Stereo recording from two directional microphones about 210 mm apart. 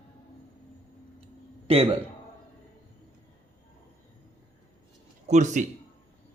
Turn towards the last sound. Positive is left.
turn(degrees=-35)  # may be behind; listen again after turning